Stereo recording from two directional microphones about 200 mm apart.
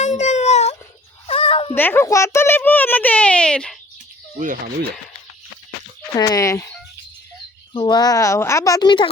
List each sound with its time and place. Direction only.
0.0 s a sound: 35° left (ahead or behind)
1.3 s cat: 30° left (ahead or behind)
1.7 s a child's voice: 10° left (ahead or behind)
4.4 s speech: 40° right (ahead or behind)
6.1 s a child's voice: 15° left (ahead or behind)
7.7 s a woman's voice: 20° left (ahead or behind)